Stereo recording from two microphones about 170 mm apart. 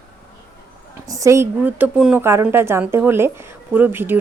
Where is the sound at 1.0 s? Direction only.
20° right (ahead or behind).